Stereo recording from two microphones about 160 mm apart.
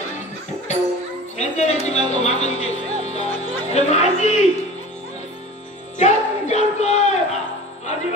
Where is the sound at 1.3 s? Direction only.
45° left (ahead or behind).